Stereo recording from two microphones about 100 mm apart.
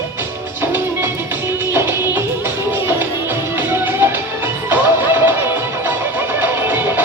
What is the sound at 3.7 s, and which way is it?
Music, 20° right (ahead or behind).